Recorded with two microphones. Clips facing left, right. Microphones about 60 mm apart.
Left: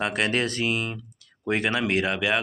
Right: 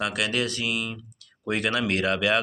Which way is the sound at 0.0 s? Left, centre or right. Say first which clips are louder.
Left 2 dB; left.